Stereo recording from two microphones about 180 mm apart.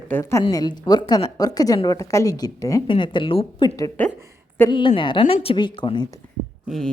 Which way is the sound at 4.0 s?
10° left (ahead or behind).